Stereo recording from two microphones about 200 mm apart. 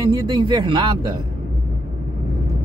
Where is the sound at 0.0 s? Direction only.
20° right (ahead or behind).